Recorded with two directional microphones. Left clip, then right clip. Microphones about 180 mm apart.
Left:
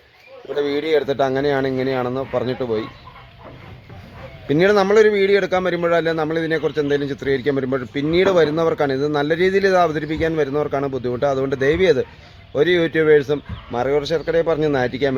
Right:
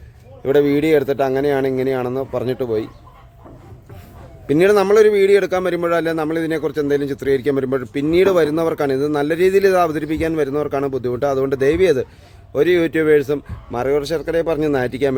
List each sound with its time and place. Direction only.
0.6 s a man's voice: 35° right (ahead or behind)
4.4 s a man's voice: 35° right (ahead or behind)